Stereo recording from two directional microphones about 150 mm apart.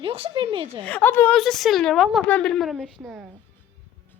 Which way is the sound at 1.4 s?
Centre (ahead or behind).